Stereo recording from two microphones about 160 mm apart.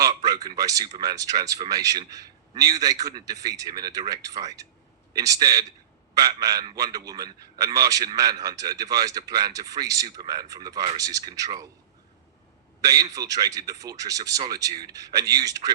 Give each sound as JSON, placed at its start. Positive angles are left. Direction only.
{"t": 0.0, "sound": "a man's voice", "side_deg": -25}
{"t": 12.8, "sound": "a man's voice", "side_deg": -25}